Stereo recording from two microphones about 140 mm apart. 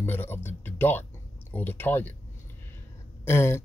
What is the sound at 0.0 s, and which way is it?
Music, 15° left (ahead or behind).